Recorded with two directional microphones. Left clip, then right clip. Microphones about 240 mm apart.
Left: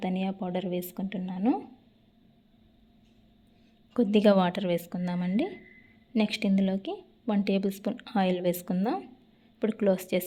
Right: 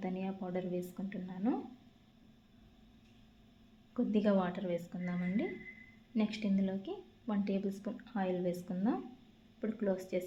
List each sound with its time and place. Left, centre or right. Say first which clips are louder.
0.0 s a woman's voice: left 8 dB; left
3.9 s a woman's voice: left 10 dB; left